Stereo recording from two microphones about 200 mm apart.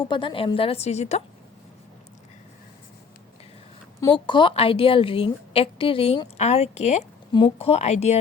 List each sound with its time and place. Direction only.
0.0 s a woman's voice: 25° left (ahead or behind)
4.0 s a woman's voice: 25° left (ahead or behind)